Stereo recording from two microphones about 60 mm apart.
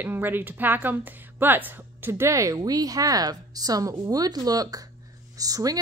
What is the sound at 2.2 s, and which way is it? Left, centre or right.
Speech, right.